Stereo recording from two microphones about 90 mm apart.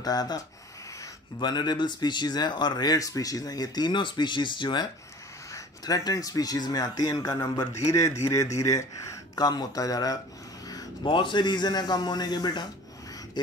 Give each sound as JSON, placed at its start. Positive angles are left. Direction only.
{"t": 0.0, "sound": "speech", "side_deg": 45}
{"t": 1.4, "sound": "speech", "side_deg": 55}
{"t": 5.5, "sound": "speech", "side_deg": 45}
{"t": 9.3, "sound": "speech", "side_deg": 50}
{"t": 11.1, "sound": "speech", "side_deg": 65}